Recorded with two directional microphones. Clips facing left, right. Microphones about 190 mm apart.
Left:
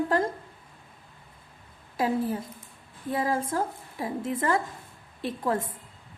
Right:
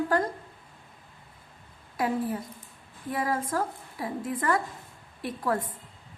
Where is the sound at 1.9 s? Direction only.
25° left (ahead or behind).